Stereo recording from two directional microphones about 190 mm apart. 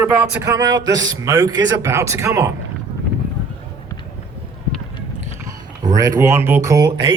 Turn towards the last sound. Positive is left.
turn(degrees=-15)  # may be behind; listen again after turning